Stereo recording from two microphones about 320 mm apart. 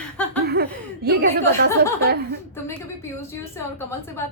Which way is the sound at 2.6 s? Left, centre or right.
Centre.